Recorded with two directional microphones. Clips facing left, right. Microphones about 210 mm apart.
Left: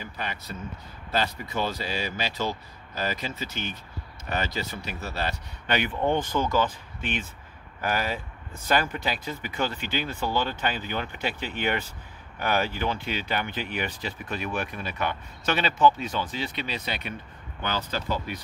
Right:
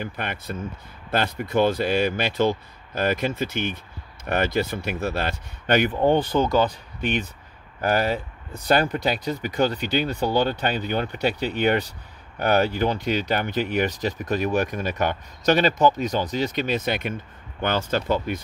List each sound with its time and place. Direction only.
0.0 s speech: 55° right (ahead or behind)
6.0 s speech: 35° right (ahead or behind); by 18.4 s 55° right (ahead or behind)